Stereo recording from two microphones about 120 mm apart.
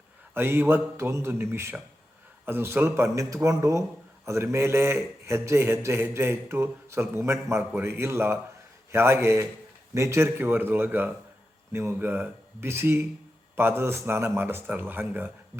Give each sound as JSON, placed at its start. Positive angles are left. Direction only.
{"t": 0.3, "sound": "a man's voice", "side_deg": -20}